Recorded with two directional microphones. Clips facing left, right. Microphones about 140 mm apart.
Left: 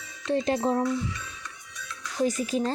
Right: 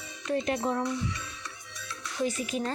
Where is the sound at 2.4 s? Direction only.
35° left (ahead or behind).